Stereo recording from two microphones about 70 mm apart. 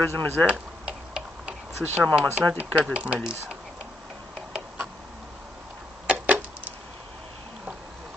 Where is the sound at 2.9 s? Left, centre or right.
Right.